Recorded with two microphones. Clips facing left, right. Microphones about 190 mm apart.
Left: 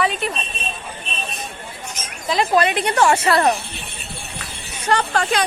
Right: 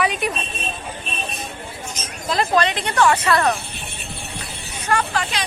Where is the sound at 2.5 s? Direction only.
15° left (ahead or behind).